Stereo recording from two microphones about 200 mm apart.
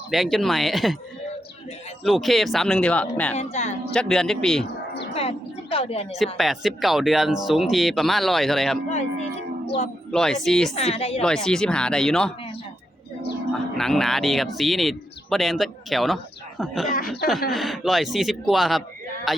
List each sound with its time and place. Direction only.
0.1 s speech: centre (ahead or behind)
2.0 s speech: centre (ahead or behind)
3.3 s speech: 35° left (ahead or behind)
3.9 s speech: 5° left (ahead or behind)
5.7 s a woman's voice: 30° left (ahead or behind)
6.1 s speech: centre (ahead or behind)
8.9 s speech: 35° left (ahead or behind)
10.1 s speech: 5° left (ahead or behind)
10.8 s a woman's voice: 30° left (ahead or behind)
11.2 s speech: 5° left (ahead or behind)
13.5 s speech: centre (ahead or behind)